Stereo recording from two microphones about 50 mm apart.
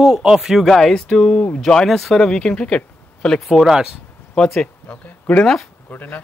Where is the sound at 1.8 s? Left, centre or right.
Centre; by 3.4 s left.